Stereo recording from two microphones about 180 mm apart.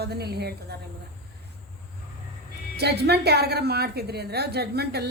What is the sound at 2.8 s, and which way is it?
Speech, 65° right (ahead or behind).